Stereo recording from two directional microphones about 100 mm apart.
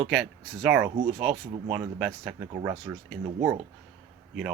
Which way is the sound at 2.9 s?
25° right (ahead or behind).